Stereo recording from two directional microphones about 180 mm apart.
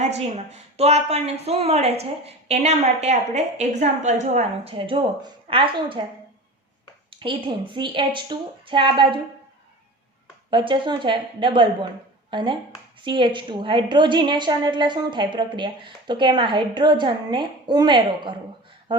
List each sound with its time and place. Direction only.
0.5 s speech: 35° right (ahead or behind)
7.2 s a woman's voice: 25° right (ahead or behind)
10.5 s a woman's voice: 25° right (ahead or behind)